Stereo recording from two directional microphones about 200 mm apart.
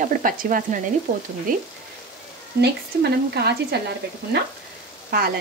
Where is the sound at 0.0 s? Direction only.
45° right (ahead or behind).